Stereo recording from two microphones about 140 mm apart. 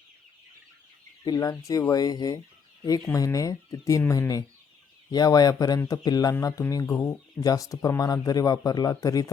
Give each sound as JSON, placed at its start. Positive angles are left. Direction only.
{"t": 1.2, "sound": "speech", "side_deg": 25}